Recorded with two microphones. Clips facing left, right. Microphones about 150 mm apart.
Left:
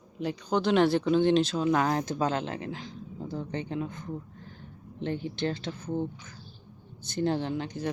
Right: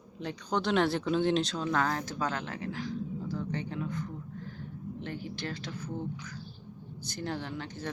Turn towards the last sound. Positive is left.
turn(degrees=15)  # may be behind; listen again after turning